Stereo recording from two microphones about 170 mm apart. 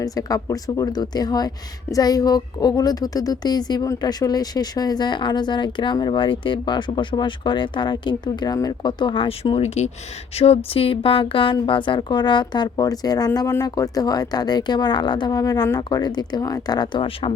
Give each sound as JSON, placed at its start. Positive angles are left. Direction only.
{"t": 0.0, "sound": "speech", "side_deg": 20}